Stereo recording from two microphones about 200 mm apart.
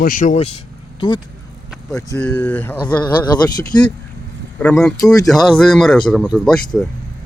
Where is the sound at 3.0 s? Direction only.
20° left (ahead or behind).